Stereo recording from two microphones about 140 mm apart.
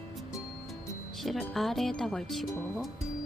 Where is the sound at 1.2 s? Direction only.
Centre (ahead or behind).